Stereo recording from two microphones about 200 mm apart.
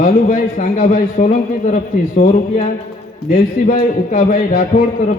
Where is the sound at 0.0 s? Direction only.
40° left (ahead or behind).